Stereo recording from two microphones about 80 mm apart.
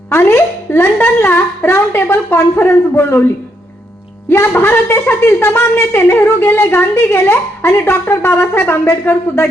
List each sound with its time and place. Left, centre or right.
0.1 s speech: left
4.5 s speech: left